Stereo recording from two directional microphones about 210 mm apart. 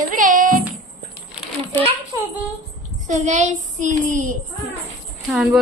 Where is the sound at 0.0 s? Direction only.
40° right (ahead or behind).